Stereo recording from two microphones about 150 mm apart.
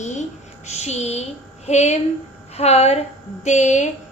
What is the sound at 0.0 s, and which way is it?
A woman's voice, 50° left (ahead or behind).